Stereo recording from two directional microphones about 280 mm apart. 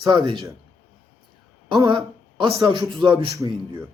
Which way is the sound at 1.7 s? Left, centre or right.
Centre.